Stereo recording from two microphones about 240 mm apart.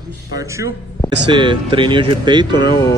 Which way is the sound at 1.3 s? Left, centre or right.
Centre.